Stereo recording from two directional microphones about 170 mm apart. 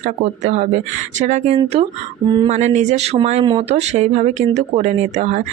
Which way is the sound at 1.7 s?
30° right (ahead or behind).